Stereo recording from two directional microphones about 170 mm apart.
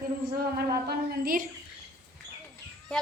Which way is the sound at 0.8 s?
60° right (ahead or behind).